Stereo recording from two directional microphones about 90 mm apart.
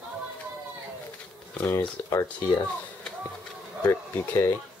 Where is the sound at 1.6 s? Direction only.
40° left (ahead or behind).